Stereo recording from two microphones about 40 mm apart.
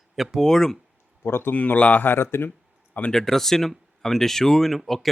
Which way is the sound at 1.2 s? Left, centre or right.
Left.